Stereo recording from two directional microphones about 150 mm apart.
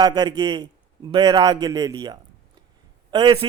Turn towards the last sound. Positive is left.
turn(degrees=-30)  # may be behind; listen again after turning